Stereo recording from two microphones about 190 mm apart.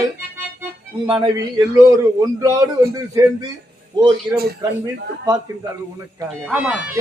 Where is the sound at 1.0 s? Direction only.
25° right (ahead or behind).